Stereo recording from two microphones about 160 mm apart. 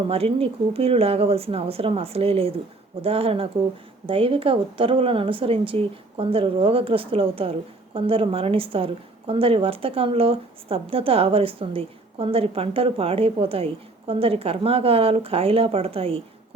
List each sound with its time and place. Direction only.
0.1 s speech: 35° right (ahead or behind)